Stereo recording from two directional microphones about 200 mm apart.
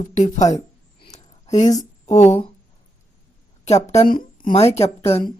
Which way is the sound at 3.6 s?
35° left (ahead or behind).